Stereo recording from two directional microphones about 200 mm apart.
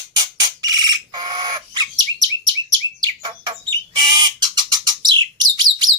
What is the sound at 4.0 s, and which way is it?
Bird, 20° right (ahead or behind).